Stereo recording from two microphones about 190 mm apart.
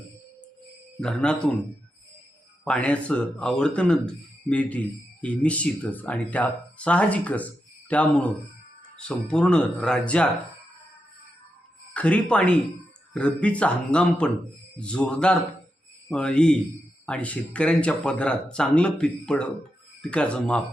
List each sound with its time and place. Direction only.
0.9 s speech: 5° left (ahead or behind)
2.6 s speech: 5° left (ahead or behind)
11.9 s speech: 5° left (ahead or behind)